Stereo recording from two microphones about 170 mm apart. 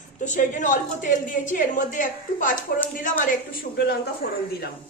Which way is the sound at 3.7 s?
70° left (ahead or behind).